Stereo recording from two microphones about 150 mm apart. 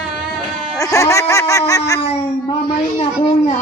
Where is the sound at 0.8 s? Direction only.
20° left (ahead or behind).